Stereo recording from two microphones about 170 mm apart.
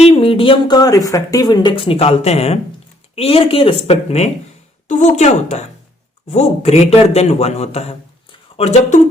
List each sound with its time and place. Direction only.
0.0 s a man's voice: 35° left (ahead or behind)